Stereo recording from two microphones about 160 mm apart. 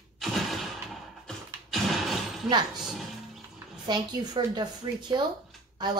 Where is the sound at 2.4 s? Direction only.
25° right (ahead or behind).